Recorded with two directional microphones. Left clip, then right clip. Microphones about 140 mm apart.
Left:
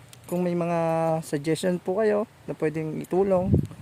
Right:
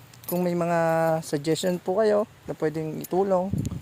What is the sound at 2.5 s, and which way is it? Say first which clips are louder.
Speech: even; 30° left (ahead or behind).